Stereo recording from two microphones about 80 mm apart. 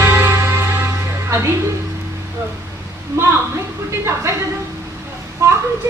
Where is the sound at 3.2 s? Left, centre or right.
Right.